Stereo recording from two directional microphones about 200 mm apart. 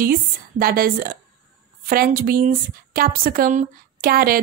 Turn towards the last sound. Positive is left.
turn(degrees=-45)  # may be behind; listen again after turning